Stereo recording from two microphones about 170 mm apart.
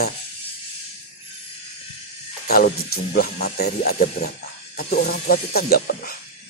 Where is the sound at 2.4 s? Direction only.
65° left (ahead or behind).